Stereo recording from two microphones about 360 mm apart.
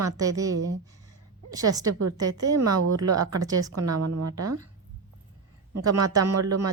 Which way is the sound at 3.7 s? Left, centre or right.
Right.